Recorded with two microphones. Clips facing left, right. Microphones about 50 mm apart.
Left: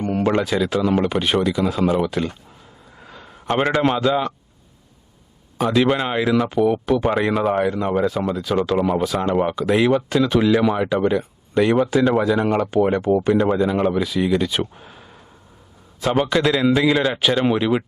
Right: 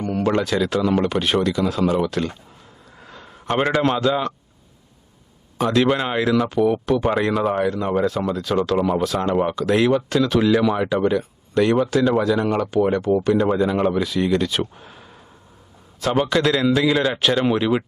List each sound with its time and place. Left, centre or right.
0.0 s a sound: left
0.3 s speech: centre
3.0 s a sound: centre
3.5 s speech: centre
5.5 s speech: centre; by 13.3 s left
13.3 s speech: centre
13.6 s speech: centre
14.8 s a sound: centre
16.0 s speech: centre